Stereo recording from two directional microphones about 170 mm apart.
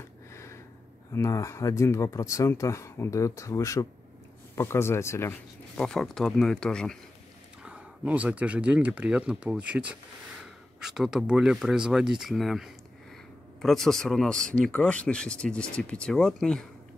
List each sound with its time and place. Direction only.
0.3 s a sound: 15° left (ahead or behind)
1.1 s speech: 20° left (ahead or behind)
5.8 s speech: 5° left (ahead or behind)
7.6 s speech: 5° right (ahead or behind)